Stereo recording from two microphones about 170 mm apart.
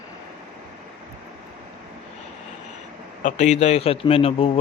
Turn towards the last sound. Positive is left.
turn(degrees=35)  # may be behind; listen again after turning